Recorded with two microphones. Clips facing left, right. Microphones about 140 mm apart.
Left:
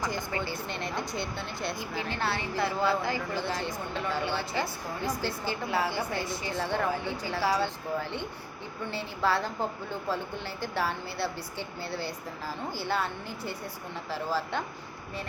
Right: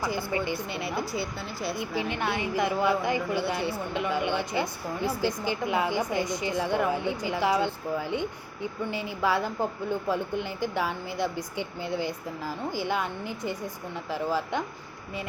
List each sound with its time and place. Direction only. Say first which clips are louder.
0.0 s speech: right 3 dB; 10° right (ahead or behind)
1.7 s speech: right 4 dB; 20° right (ahead or behind)